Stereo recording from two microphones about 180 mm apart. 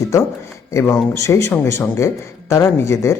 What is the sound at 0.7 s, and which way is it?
Speech, 15° left (ahead or behind).